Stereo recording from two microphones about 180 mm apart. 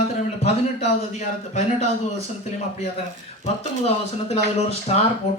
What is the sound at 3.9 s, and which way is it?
A man's voice, 35° left (ahead or behind).